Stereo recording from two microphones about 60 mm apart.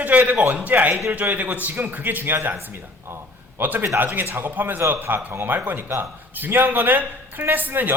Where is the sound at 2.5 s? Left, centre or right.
Right.